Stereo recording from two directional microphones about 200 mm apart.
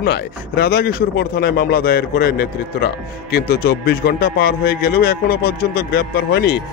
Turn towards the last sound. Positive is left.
turn(degrees=50)  # may be behind; listen again after turning